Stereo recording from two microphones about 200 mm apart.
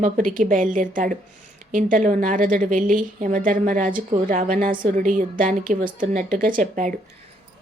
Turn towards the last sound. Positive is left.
turn(degrees=-40)  # may be behind; listen again after turning